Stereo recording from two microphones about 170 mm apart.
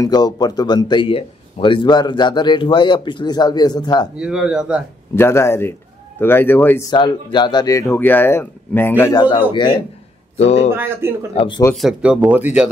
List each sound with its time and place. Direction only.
0.0 s a man's voice: 25° left (ahead or behind)
4.2 s speech: 5° right (ahead or behind)
5.1 s speech: 15° left (ahead or behind)
6.9 s speech: 25° left (ahead or behind)
10.3 s speech: 40° left (ahead or behind)
10.7 s speech: 15° right (ahead or behind)
11.3 s a man's voice: 30° left (ahead or behind)
11.7 s speech: 5° right (ahead or behind)